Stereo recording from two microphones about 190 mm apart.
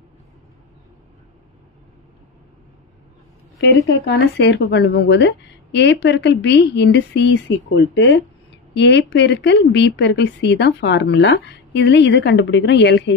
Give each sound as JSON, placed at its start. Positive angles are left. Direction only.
{"t": 3.6, "sound": "speech", "side_deg": 65}